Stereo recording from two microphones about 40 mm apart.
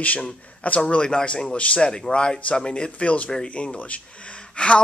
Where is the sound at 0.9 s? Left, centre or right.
Left.